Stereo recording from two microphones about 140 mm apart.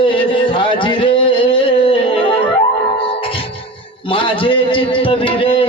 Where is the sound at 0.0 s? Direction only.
35° left (ahead or behind).